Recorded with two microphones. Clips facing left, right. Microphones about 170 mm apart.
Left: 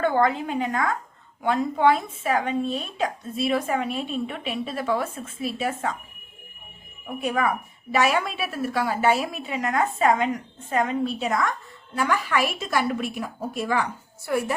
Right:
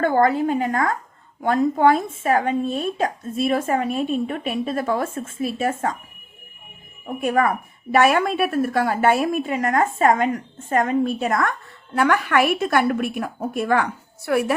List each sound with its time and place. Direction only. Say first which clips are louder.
0.0 s speech: right 4 dB; 45° right (ahead or behind)
7.2 s a woman's voice: right 4 dB; 50° right (ahead or behind)
14.3 s a woman's voice: right 5 dB; 70° right (ahead or behind)